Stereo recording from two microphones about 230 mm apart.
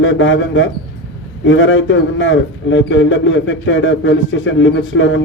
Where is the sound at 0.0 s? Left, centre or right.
Left.